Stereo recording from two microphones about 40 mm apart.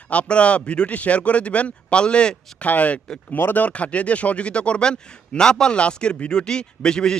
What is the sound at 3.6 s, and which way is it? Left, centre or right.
Speech, left.